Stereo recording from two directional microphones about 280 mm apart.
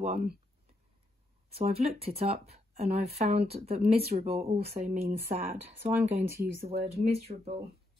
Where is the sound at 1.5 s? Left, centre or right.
Right.